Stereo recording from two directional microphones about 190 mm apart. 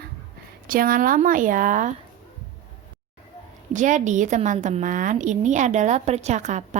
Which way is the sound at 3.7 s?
40° right (ahead or behind).